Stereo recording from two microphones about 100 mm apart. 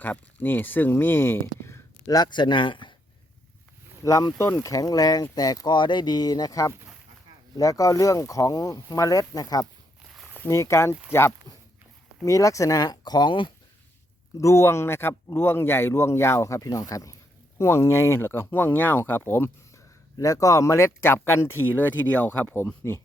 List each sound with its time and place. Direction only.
0.0 s speech: 15° left (ahead or behind)
2.0 s speech: 45° left (ahead or behind)
4.0 s speech: 35° left (ahead or behind)
10.3 s a sound: 20° left (ahead or behind)
10.6 s speech: 30° left (ahead or behind); by 13.5 s 55° left (ahead or behind)
14.3 s speech: 30° left (ahead or behind)
20.1 s speech: 35° left (ahead or behind)